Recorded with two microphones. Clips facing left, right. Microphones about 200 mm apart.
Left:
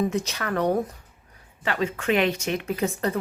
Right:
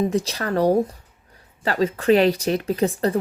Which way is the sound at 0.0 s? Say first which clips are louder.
Right 3 dB; 30° right (ahead or behind).